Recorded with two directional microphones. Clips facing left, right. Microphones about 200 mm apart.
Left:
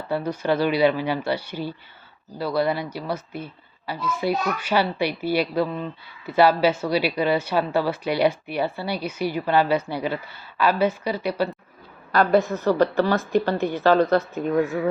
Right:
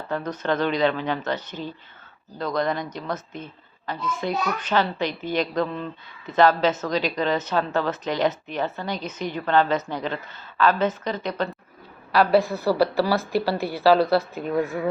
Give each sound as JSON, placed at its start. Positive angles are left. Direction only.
{"t": 0.1, "sound": "speech", "side_deg": 10}
{"t": 12.1, "sound": "a woman's voice", "side_deg": -5}
{"t": 12.4, "sound": "a woman's voice", "side_deg": -35}
{"t": 12.6, "sound": "speech", "side_deg": -10}